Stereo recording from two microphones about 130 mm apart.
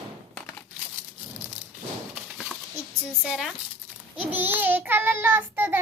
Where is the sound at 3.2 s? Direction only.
5° right (ahead or behind).